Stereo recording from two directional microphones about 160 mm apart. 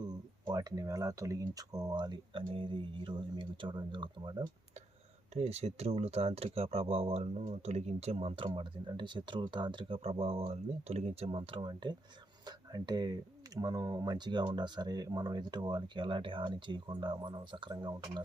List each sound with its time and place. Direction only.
0.0 s speech: 25° right (ahead or behind)
5.3 s speech: 40° right (ahead or behind)